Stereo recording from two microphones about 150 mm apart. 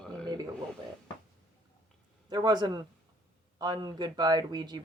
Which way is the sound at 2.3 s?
30° right (ahead or behind).